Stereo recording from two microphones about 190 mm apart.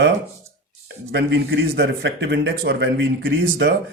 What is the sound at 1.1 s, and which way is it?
A man's voice, 60° right (ahead or behind).